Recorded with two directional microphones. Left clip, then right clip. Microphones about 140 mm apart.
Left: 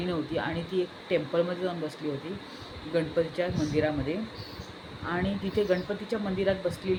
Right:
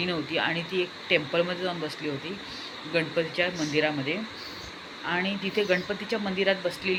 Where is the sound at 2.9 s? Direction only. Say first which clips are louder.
Right 1 dB; 20° left (ahead or behind).